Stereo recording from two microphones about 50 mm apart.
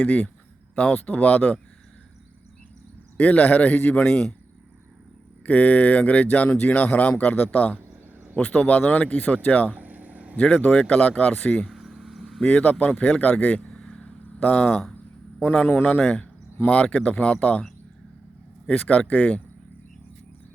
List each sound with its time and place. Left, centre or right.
0.0 s speech: left
3.2 s speech: left
4.0 s a man's voice: centre
5.5 s speech: left
9.7 s vehicle: right
10.3 s speech: left
11.7 s vehicle: centre
12.4 s speech: left
13.7 s vehicle: centre
14.3 s speech: left
18.7 s speech: left